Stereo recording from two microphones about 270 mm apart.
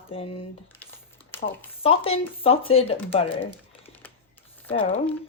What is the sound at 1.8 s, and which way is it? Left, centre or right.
Speech, left.